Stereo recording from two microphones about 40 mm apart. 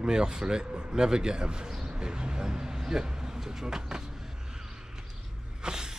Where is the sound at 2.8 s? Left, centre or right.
Centre.